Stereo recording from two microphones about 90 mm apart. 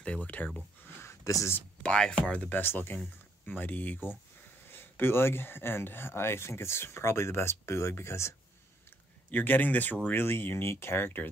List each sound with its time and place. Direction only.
0.0 s speech: 15° left (ahead or behind)
0.8 s a sound: 30° left (ahead or behind)
1.8 s speech: 10° left (ahead or behind); by 11.2 s 25° left (ahead or behind)